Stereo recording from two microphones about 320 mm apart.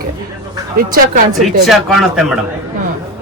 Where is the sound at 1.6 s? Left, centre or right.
Centre.